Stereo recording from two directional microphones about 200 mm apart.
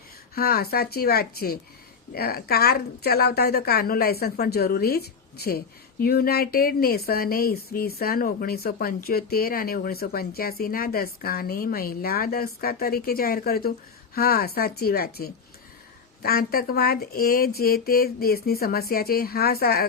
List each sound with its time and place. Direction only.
0.3 s a woman's voice: 50° left (ahead or behind)